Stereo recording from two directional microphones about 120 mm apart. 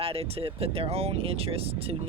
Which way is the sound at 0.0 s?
55° right (ahead or behind).